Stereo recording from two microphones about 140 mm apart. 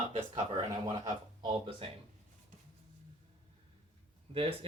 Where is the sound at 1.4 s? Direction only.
40° right (ahead or behind).